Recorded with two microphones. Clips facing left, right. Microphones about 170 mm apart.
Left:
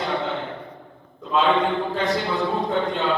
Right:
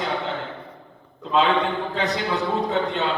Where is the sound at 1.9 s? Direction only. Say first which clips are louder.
Left 1 dB; 70° right (ahead or behind).